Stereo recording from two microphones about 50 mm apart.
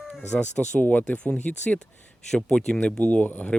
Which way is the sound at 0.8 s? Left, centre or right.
Left.